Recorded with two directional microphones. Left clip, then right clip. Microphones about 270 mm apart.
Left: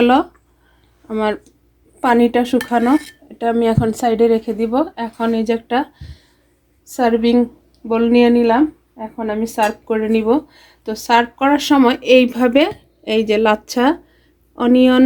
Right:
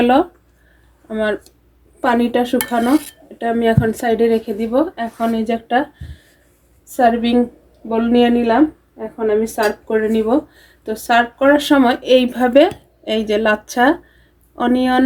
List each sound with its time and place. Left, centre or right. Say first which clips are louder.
0.0 s a sound: even; left
1.0 s speech: even; left
6.9 s speech: right 1 dB; left
9.8 s speech: even; left